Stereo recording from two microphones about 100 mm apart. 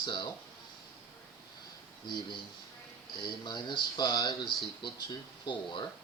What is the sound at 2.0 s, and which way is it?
Speech, 45° left (ahead or behind).